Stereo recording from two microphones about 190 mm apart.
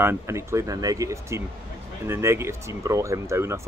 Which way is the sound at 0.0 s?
15° right (ahead or behind).